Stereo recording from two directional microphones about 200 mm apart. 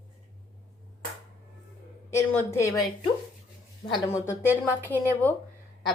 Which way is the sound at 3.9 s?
20° left (ahead or behind).